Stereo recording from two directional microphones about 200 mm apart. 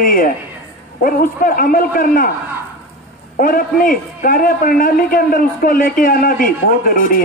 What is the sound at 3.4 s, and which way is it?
A man's voice, 45° left (ahead or behind).